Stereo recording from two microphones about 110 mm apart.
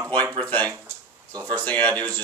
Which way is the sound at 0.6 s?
30° right (ahead or behind).